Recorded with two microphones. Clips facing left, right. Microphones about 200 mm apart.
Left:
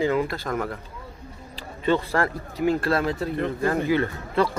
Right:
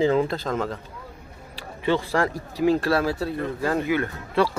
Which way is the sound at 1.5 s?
10° right (ahead or behind).